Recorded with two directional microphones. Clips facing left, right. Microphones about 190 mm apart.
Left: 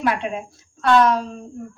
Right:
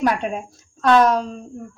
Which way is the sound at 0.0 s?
45° right (ahead or behind).